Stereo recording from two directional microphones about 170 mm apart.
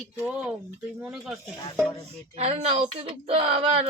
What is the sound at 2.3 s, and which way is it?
A woman's voice, 35° right (ahead or behind).